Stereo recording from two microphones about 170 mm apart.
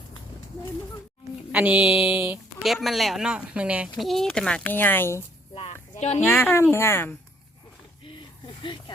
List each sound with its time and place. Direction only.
1.5 s mantra: 10° right (ahead or behind)
2.8 s speech: centre (ahead or behind)
5.5 s a sound: 35° left (ahead or behind)
6.2 s speech: 15° left (ahead or behind)
8.0 s snake: 30° left (ahead or behind)